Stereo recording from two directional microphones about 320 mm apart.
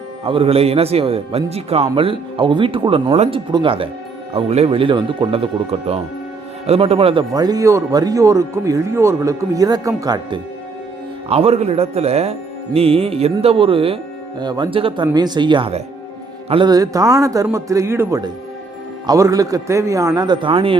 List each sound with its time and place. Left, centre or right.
0.3 s speech: centre
6.7 s speech: centre